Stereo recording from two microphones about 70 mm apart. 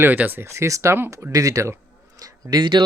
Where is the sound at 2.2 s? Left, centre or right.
Right.